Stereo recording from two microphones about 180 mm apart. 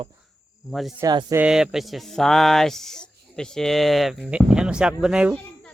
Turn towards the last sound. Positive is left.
turn(degrees=-5)  # may be behind; listen again after turning